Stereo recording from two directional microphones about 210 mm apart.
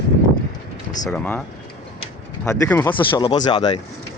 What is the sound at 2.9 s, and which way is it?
Speech, 25° left (ahead or behind).